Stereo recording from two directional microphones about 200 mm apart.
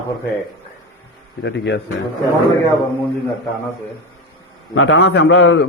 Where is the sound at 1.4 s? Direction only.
60° left (ahead or behind).